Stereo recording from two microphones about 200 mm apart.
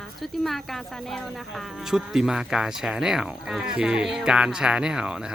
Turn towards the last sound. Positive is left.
turn(degrees=-5)  # may be behind; listen again after turning